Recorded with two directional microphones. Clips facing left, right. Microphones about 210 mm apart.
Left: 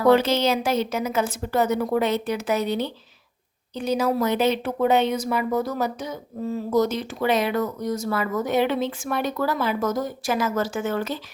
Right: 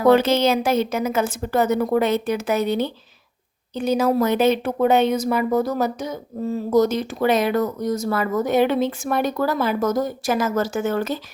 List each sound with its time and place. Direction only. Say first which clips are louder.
0.1 s speech: right 3 dB; 50° right (ahead or behind)